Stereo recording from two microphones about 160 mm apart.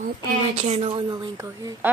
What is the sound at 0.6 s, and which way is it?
Speech, 40° right (ahead or behind).